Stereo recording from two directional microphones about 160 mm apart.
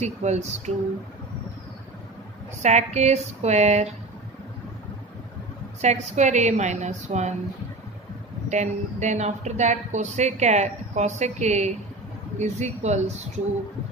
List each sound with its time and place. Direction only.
0.0 s a woman's voice: 45° right (ahead or behind)
2.6 s a woman's voice: 45° right (ahead or behind)
5.8 s a woman's voice: 45° right (ahead or behind)
8.5 s a woman's voice: 45° right (ahead or behind)